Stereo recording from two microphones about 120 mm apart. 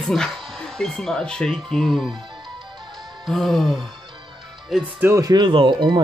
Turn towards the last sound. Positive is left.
turn(degrees=-40)  # may be behind; listen again after turning